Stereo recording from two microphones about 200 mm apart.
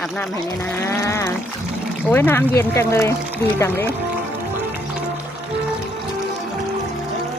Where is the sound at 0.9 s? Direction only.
15° left (ahead or behind).